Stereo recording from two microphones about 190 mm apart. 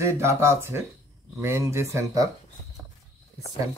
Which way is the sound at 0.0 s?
15° right (ahead or behind).